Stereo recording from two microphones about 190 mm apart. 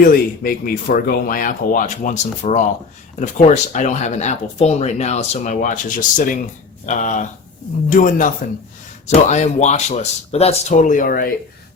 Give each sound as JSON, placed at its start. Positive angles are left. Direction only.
{"t": 0.0, "sound": "speech", "side_deg": 50}